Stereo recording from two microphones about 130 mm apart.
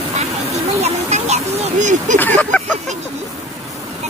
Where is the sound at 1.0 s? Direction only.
60° right (ahead or behind).